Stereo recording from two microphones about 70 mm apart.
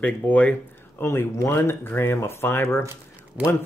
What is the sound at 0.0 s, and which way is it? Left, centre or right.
Speech, left.